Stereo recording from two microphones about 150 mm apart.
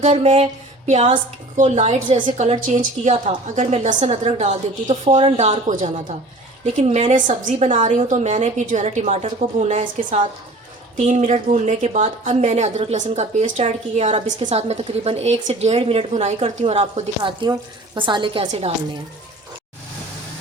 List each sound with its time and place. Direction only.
0.0 s a woman's voice: 45° right (ahead or behind)
2.0 s speech: 35° right (ahead or behind)
2.7 s a woman's voice: 50° right (ahead or behind)
17.4 s speech: 30° right (ahead or behind)